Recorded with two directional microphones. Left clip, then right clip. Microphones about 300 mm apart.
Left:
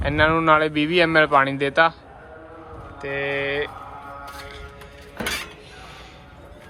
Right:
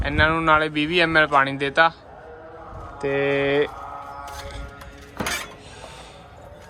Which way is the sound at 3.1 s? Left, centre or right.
Right.